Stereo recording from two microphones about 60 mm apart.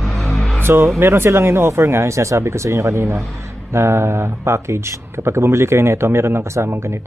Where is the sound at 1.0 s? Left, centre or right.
Right.